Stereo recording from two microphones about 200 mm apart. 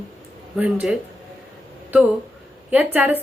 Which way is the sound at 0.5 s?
5° right (ahead or behind).